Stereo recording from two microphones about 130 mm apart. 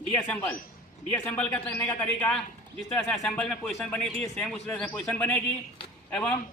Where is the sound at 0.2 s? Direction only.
10° left (ahead or behind).